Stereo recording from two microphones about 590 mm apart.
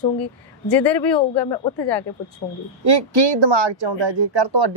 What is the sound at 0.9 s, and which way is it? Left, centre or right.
A man's voice, centre.